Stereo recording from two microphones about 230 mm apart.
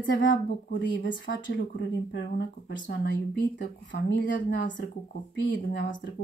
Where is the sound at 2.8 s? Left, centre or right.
Left.